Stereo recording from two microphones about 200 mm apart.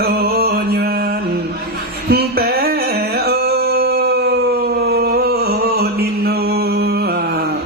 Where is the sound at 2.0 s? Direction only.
50° right (ahead or behind).